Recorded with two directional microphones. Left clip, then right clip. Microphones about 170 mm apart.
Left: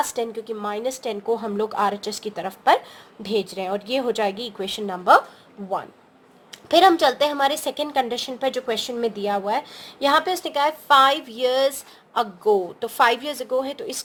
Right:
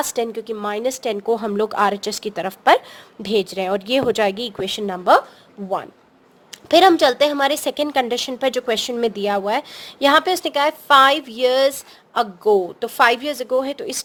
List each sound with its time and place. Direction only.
0.0 s a woman's voice: 55° right (ahead or behind); by 5.2 s 35° right (ahead or behind)
6.5 s a woman's voice: 45° right (ahead or behind)